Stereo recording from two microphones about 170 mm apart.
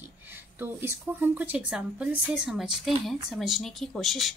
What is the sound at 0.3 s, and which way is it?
A woman's voice, 10° right (ahead or behind).